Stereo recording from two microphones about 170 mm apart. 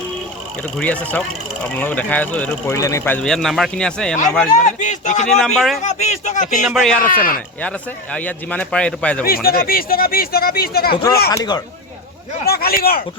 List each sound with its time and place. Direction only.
0.8 s speech: 10° left (ahead or behind)
2.7 s speech: 20° left (ahead or behind)
4.5 s a man's voice: 45° left (ahead or behind)
5.4 s speech: centre (ahead or behind)
5.8 s speech: 45° left (ahead or behind)
6.7 s speech: 5° left (ahead or behind)
7.0 s speech: 55° left (ahead or behind)
7.6 s speech: 5° left (ahead or behind)
9.2 s speech: 60° left (ahead or behind)
11.3 s speech: 20° left (ahead or behind)
12.5 s speech: 65° left (ahead or behind)